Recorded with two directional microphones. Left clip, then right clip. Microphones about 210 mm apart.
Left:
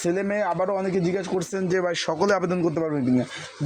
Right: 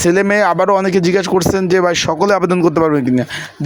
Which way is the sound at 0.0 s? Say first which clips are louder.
Right 12 dB; 40° right (ahead or behind).